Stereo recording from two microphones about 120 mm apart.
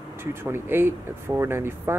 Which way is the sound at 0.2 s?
20° right (ahead or behind).